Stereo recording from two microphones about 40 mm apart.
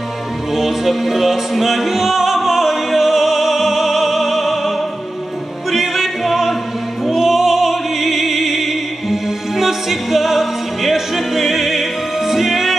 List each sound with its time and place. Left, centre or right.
0.5 s music: centre